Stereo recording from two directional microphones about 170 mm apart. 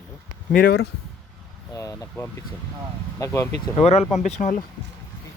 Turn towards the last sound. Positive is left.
turn(degrees=45)  # may be behind; listen again after turning